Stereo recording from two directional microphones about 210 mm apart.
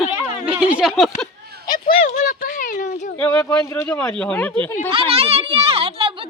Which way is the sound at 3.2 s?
10° left (ahead or behind).